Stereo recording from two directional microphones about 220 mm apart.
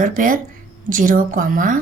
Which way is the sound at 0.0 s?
40° right (ahead or behind).